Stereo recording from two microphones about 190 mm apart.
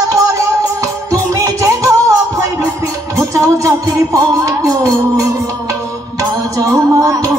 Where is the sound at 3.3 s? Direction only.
15° right (ahead or behind).